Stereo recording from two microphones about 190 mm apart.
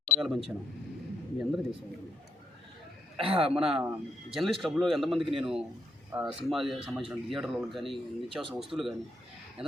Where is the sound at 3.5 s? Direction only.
5° right (ahead or behind).